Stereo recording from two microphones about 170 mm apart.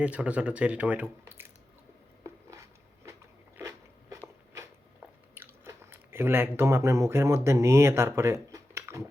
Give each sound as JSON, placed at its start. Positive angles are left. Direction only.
{"t": 0.0, "sound": "speech", "side_deg": -10}
{"t": 2.2, "sound": "a sound", "side_deg": -20}
{"t": 3.6, "sound": "biting", "side_deg": -15}
{"t": 5.3, "sound": "speech", "side_deg": -15}